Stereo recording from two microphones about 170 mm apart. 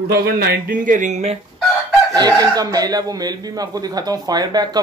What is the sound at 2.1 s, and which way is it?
Speech, 25° right (ahead or behind).